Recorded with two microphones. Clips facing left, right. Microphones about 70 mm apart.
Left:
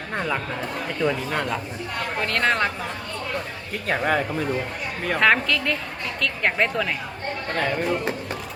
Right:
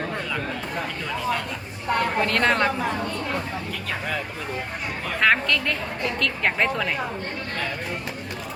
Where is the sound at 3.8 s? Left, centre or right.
Left.